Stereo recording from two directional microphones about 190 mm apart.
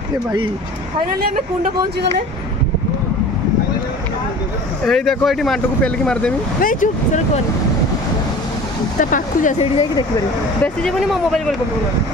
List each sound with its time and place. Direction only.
4.8 s speech: centre (ahead or behind)
6.6 s speech: 45° left (ahead or behind)
9.1 s speech: 40° left (ahead or behind)
10.6 s speech: 5° left (ahead or behind)